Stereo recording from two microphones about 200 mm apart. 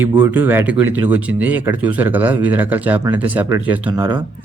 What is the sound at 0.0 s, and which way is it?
Speech, 10° right (ahead or behind).